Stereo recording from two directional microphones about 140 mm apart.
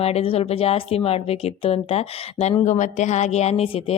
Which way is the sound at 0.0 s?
45° left (ahead or behind).